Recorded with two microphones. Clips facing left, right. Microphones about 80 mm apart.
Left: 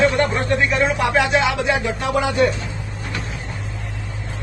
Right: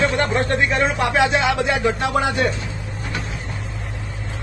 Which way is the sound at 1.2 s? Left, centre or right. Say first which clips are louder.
Even; right.